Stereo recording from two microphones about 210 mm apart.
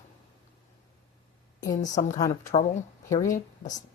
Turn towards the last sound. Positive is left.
turn(degrees=35)  # may be behind; listen again after turning